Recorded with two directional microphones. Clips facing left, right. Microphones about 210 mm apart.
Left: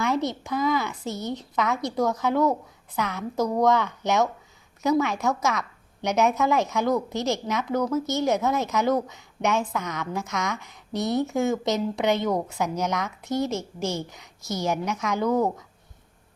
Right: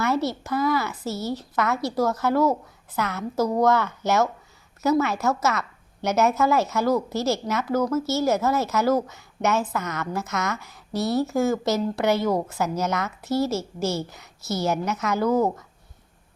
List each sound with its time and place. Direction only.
0.0 s a woman's voice: 5° right (ahead or behind)
7.2 s a woman's voice: 15° left (ahead or behind)
7.4 s a woman's voice: 5° right (ahead or behind)
10.9 s a woman's voice: 20° left (ahead or behind)
11.2 s a woman's voice: centre (ahead or behind)
13.4 s a woman's voice: 15° left (ahead or behind)
14.8 s a woman's voice: 5° right (ahead or behind)